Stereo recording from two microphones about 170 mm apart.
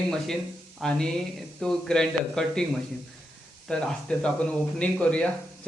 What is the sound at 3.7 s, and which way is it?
Speech, 5° left (ahead or behind).